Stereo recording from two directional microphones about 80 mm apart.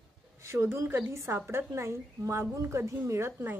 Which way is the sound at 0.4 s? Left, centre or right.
Right.